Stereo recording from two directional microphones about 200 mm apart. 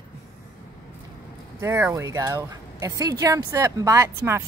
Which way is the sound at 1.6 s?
10° right (ahead or behind).